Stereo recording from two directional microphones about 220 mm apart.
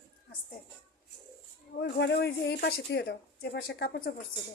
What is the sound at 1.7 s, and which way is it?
Speech, 50° left (ahead or behind).